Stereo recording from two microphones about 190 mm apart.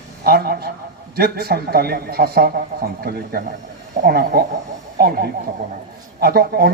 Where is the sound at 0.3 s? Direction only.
55° right (ahead or behind).